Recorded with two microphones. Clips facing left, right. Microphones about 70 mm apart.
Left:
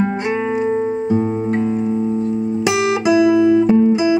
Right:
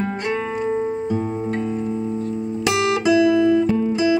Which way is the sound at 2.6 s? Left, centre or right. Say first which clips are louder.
Left 1 dB; centre.